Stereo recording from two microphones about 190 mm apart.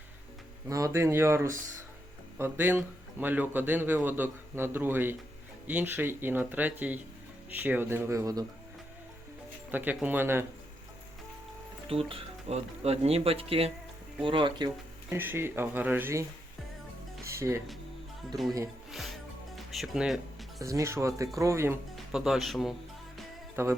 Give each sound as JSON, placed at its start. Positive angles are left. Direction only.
{"t": 0.7, "sound": "speech", "side_deg": -15}
{"t": 9.7, "sound": "speech", "side_deg": -10}
{"t": 11.9, "sound": "speech", "side_deg": -30}
{"t": 15.1, "sound": "speech", "side_deg": -10}
{"t": 17.2, "sound": "music", "side_deg": -15}
{"t": 18.3, "sound": "speech", "side_deg": -20}
{"t": 18.9, "sound": "music", "side_deg": 0}
{"t": 20.6, "sound": "speech", "side_deg": -15}
{"t": 21.9, "sound": "speech", "side_deg": 0}
{"t": 23.6, "sound": "speech", "side_deg": -15}